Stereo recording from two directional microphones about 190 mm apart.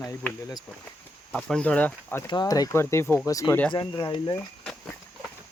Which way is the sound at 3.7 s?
25° left (ahead or behind).